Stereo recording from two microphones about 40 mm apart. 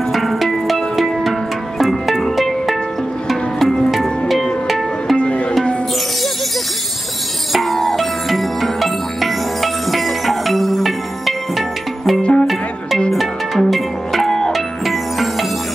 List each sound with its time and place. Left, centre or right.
0.1 s music: centre
5.1 s music: left
7.5 s music: centre
12.2 s music: left
13.1 s music: centre